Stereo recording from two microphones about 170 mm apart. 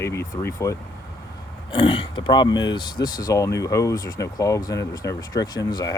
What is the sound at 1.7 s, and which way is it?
Speech, 30° left (ahead or behind).